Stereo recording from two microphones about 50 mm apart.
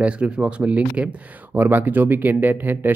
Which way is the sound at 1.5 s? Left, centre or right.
Right.